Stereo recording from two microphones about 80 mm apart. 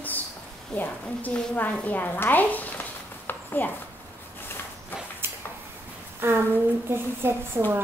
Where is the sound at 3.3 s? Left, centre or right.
Left.